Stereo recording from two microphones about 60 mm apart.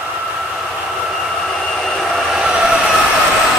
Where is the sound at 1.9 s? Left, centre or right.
Centre.